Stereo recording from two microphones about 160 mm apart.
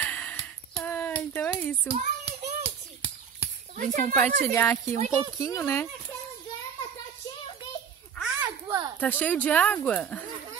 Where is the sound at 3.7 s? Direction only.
55° right (ahead or behind).